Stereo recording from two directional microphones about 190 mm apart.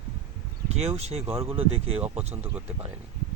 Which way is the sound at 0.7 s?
35° right (ahead or behind).